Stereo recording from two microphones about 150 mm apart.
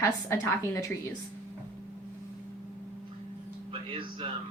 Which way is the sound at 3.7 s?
35° right (ahead or behind).